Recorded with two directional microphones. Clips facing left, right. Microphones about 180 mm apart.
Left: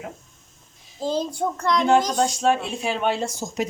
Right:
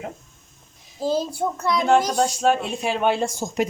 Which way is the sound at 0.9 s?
10° right (ahead or behind).